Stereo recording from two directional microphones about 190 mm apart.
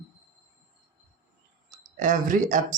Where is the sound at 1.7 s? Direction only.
45° right (ahead or behind).